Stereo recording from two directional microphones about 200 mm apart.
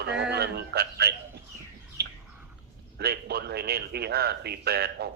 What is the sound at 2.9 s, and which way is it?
Speech, 55° right (ahead or behind).